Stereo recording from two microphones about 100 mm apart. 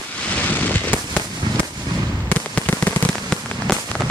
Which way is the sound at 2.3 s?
15° left (ahead or behind).